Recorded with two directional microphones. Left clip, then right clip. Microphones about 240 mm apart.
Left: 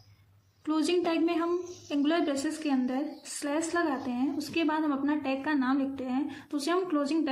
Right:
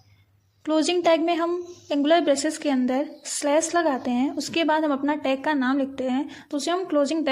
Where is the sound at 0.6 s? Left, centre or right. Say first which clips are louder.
Right 7 dB; right.